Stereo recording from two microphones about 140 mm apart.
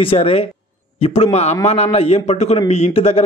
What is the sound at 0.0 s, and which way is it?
A man's voice, 45° left (ahead or behind).